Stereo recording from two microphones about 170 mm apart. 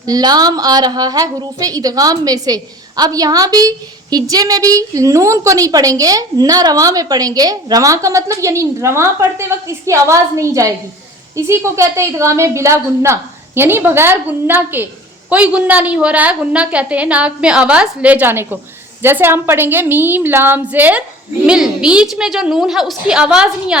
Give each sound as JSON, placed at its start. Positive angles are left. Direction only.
{"t": 0.0, "sound": "a woman's voice", "side_deg": -25}